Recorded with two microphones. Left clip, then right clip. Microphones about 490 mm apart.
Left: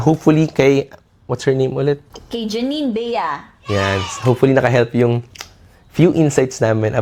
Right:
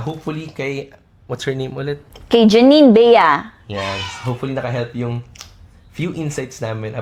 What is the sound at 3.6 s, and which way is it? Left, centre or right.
Speech, left.